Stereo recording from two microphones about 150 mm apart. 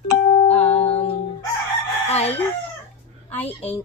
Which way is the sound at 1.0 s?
40° left (ahead or behind).